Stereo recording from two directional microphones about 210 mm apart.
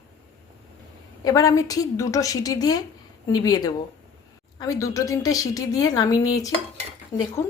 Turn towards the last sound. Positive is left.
turn(degrees=35)  # may be behind; listen again after turning